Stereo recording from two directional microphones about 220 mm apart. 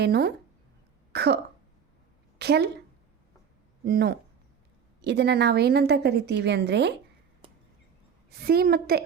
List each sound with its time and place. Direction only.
0.0 s a woman's voice: 45° right (ahead or behind)
1.1 s throat clearing: 50° right (ahead or behind)
2.4 s a woman's voice: 50° right (ahead or behind)
3.8 s a woman's voice: 45° right (ahead or behind)
7.4 s a sound: 20° right (ahead or behind)
8.4 s a woman's voice: 45° right (ahead or behind)